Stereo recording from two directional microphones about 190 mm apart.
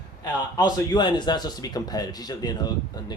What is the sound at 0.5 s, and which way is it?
Speech, 20° left (ahead or behind).